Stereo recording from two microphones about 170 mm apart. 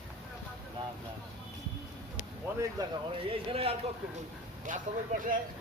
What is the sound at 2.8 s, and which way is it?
Speech, 25° right (ahead or behind).